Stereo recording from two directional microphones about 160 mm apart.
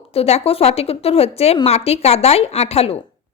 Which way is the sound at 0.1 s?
40° left (ahead or behind).